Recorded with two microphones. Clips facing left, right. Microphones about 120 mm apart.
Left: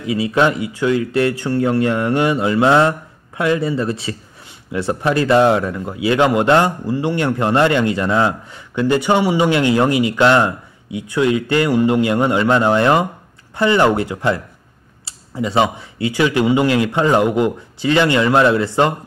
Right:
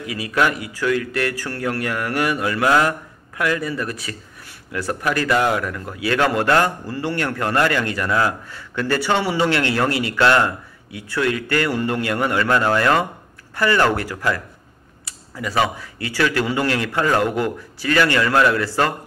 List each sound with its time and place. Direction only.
0.0 s a man's voice: 25° left (ahead or behind)